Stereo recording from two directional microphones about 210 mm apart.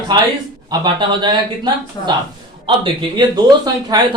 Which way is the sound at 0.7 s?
20° right (ahead or behind).